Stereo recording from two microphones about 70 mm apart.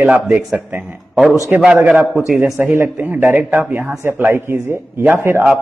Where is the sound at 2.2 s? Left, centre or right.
Centre.